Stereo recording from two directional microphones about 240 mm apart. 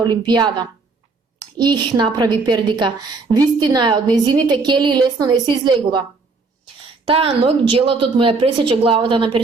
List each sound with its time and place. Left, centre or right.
0.0 s a woman's voice: centre
7.1 s a woman's voice: right